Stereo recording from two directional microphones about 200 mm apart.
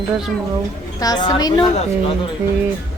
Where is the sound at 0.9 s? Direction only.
20° left (ahead or behind).